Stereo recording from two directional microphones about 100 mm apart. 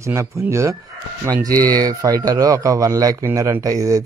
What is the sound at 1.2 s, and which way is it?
Speech, 40° right (ahead or behind).